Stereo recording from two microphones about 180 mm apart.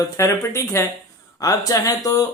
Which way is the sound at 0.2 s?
15° left (ahead or behind).